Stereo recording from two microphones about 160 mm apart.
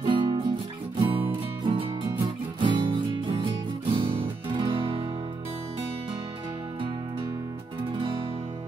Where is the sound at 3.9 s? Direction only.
35° right (ahead or behind).